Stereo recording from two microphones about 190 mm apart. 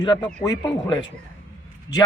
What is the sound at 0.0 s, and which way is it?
Speech, 20° left (ahead or behind).